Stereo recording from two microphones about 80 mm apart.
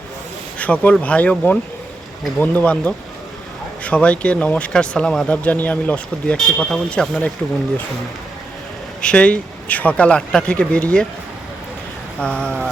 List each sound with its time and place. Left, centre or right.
0.6 s speech: centre
6.3 s speech: centre
9.0 s speech: centre
12.2 s speech: centre